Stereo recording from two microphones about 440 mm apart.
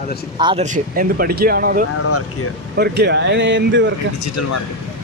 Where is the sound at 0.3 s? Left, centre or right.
Centre.